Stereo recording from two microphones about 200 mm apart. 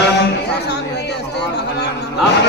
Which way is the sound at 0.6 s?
55° left (ahead or behind).